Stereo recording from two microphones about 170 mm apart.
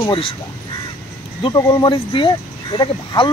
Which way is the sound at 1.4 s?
20° left (ahead or behind).